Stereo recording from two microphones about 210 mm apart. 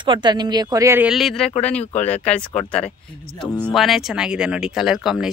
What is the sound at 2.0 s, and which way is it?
Speech, 5° left (ahead or behind).